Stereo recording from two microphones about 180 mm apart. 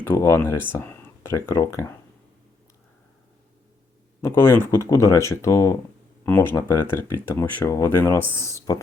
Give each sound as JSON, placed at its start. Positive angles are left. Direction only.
{"t": 0.0, "sound": "speech", "side_deg": 15}
{"t": 4.2, "sound": "speech", "side_deg": 15}